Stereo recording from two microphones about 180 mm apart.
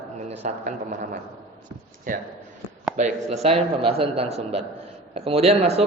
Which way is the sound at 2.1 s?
45° right (ahead or behind).